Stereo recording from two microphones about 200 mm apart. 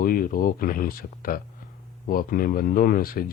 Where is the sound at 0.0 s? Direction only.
45° left (ahead or behind).